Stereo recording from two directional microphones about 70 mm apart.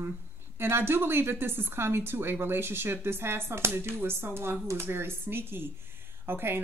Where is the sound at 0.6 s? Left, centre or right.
Right.